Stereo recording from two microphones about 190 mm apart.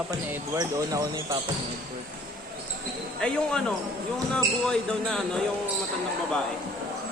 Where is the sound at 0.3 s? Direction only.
15° right (ahead or behind).